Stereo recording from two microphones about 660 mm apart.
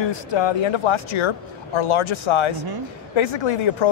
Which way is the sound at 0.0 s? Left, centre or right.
Left.